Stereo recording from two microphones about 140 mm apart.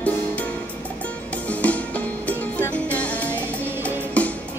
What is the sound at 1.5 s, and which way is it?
Music, 10° left (ahead or behind).